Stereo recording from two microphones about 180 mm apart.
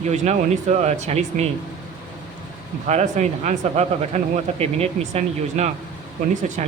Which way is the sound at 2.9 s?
40° right (ahead or behind).